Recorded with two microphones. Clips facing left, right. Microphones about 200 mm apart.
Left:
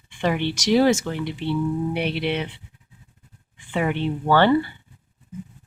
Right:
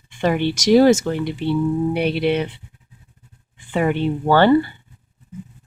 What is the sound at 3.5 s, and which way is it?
A woman's voice, 40° right (ahead or behind).